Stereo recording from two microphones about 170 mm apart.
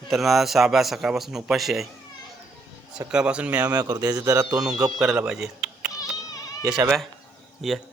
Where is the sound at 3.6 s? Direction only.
20° right (ahead or behind).